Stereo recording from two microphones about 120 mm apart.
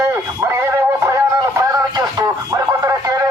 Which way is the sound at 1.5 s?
30° right (ahead or behind).